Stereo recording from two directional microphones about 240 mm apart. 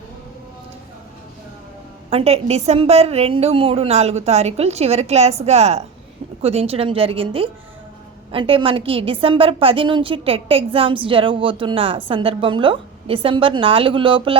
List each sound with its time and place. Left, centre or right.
2.0 s a woman's voice: right